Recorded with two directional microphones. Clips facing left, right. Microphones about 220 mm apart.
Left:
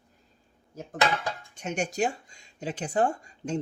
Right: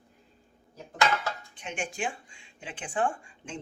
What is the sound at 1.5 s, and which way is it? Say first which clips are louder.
Speech: left 6 dB; 40° left (ahead or behind).